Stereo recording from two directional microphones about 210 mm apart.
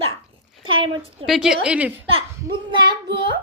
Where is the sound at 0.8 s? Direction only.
25° right (ahead or behind).